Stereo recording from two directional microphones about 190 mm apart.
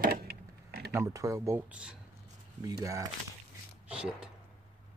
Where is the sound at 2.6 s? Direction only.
15° right (ahead or behind).